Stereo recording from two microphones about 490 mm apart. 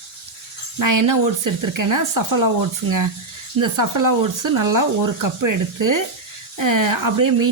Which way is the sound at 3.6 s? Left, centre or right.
Right.